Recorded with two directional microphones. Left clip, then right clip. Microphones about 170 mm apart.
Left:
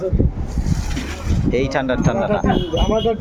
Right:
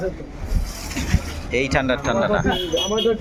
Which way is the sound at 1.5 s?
25° left (ahead or behind).